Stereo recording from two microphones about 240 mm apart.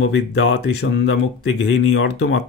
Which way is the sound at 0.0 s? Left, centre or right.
Left.